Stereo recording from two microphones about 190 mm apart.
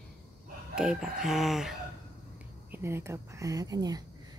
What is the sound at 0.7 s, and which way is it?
Speech, 5° right (ahead or behind).